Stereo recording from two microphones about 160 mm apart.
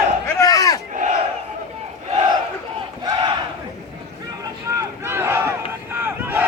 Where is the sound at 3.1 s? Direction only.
30° right (ahead or behind).